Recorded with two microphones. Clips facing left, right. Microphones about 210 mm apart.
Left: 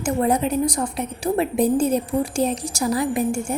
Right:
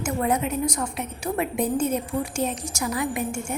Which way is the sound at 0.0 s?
35° left (ahead or behind).